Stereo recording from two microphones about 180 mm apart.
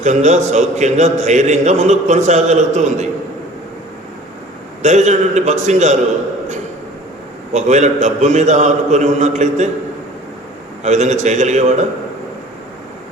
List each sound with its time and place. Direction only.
0.0 s a man's voice: 40° right (ahead or behind)
4.8 s a man's voice: 40° right (ahead or behind)
7.5 s a man's voice: 40° right (ahead or behind)
10.8 s a man's voice: 40° right (ahead or behind)